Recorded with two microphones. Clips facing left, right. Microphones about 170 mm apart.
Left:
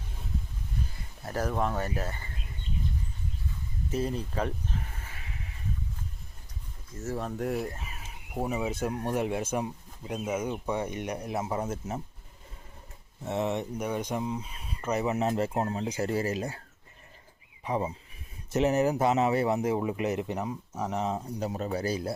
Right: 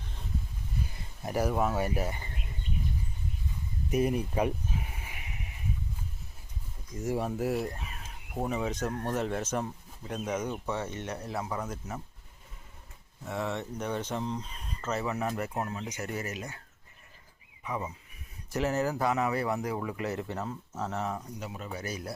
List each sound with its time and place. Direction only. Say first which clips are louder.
1.2 s speech: right 1 dB; 10° right (ahead or behind)
3.8 s a sound: right 3 dB; 15° right (ahead or behind)
6.9 s speech: right 2 dB; 15° right (ahead or behind); by 12.0 s 25° left (ahead or behind)
13.2 s speech: left 4 dB; 20° left (ahead or behind)
17.6 s speech: left 5 dB; 30° left (ahead or behind)
18.5 s speech: left 4 dB; 20° left (ahead or behind)